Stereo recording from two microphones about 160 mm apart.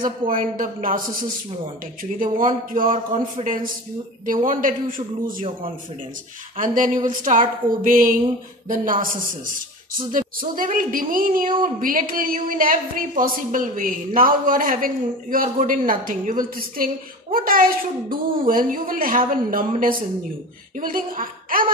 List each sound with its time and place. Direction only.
0.0 s a woman's voice: 60° right (ahead or behind)
2.1 s a woman's voice: 55° right (ahead or behind)
3.4 s a man's voice: 40° right (ahead or behind)
4.5 s a woman's voice: 60° right (ahead or behind)
6.6 s a woman's voice: 55° right (ahead or behind)
20.8 s a woman's voice: 60° right (ahead or behind)